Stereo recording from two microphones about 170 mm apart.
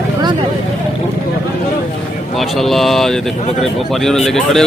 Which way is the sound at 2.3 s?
Centre (ahead or behind).